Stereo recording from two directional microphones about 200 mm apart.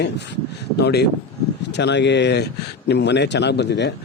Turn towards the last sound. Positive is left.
turn(degrees=60)  # may be behind; listen again after turning